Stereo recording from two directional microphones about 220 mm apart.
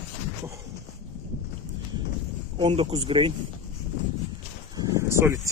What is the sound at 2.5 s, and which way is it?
Speech, 25° right (ahead or behind).